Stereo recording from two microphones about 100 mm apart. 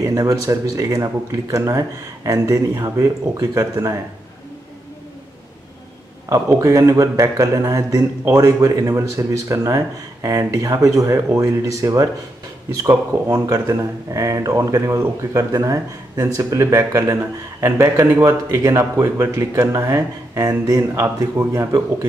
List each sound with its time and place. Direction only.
0.0 s speech: 35° right (ahead or behind)
6.2 s speech: 30° right (ahead or behind)